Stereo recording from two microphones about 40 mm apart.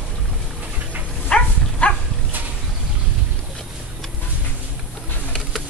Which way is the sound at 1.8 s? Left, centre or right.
Left.